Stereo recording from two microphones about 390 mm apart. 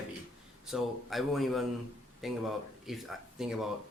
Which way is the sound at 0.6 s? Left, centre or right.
Centre.